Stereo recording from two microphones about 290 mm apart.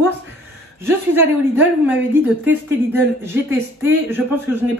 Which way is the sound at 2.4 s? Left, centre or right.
Centre.